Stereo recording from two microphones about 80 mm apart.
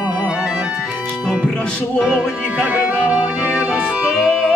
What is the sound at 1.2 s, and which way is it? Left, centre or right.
Music, centre.